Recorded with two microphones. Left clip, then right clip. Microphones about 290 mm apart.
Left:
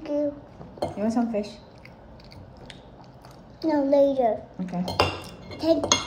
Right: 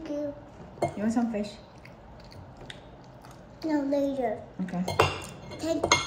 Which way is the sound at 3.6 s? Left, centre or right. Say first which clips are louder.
Left 8 dB; left.